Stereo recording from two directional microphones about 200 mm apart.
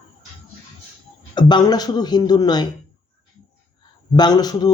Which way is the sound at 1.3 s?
20° left (ahead or behind).